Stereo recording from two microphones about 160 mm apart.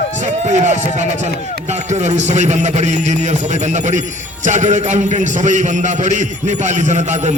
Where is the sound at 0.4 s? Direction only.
45° right (ahead or behind).